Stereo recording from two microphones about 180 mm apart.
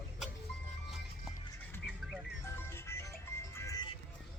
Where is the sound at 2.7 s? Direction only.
15° left (ahead or behind).